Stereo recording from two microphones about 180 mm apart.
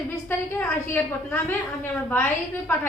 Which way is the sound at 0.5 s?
10° left (ahead or behind).